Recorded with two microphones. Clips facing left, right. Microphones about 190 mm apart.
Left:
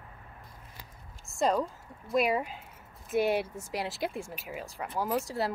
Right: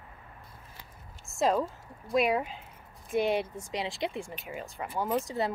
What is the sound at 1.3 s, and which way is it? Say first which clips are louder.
Speech: right 1 dB; centre (ahead or behind).